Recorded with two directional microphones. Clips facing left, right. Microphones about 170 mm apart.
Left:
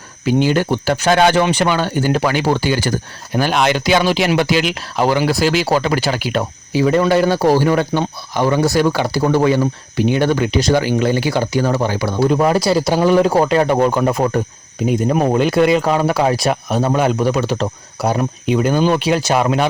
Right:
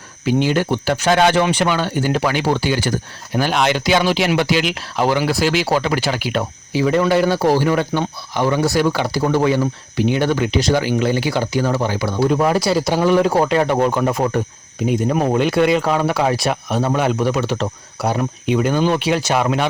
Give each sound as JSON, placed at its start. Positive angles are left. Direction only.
{"t": 0.3, "sound": "speech", "side_deg": 40}
{"t": 18.7, "sound": "speech", "side_deg": 15}
{"t": 18.9, "sound": "speech", "side_deg": 40}